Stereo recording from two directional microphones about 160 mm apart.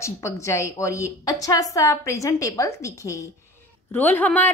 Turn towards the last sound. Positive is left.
turn(degrees=10)  # may be behind; listen again after turning